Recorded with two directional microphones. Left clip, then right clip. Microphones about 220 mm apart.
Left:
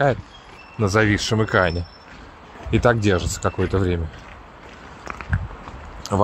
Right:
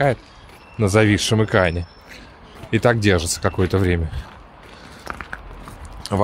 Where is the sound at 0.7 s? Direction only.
20° right (ahead or behind).